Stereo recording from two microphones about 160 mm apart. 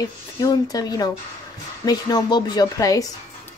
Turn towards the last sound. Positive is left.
turn(degrees=20)  # may be behind; listen again after turning